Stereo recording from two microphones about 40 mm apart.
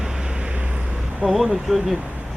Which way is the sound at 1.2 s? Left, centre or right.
Centre.